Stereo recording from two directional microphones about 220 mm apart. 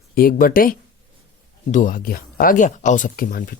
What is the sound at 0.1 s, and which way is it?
Speech, 40° left (ahead or behind).